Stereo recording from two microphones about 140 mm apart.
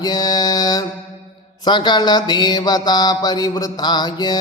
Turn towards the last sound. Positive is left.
turn(degrees=30)  # may be behind; listen again after turning